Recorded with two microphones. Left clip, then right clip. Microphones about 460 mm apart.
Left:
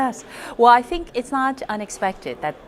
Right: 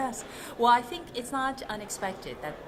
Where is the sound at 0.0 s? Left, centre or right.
Left.